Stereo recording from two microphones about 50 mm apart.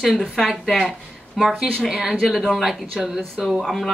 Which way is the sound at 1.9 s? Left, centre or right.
Centre.